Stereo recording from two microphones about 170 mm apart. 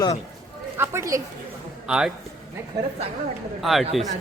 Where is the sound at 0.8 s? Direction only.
15° right (ahead or behind).